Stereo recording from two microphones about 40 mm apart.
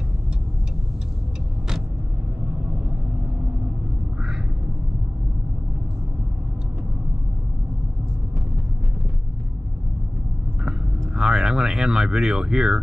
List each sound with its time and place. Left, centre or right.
11.1 s speech: centre